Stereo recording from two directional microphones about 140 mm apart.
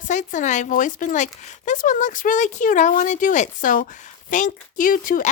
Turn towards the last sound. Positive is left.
turn(degrees=75)  # may be behind; listen again after turning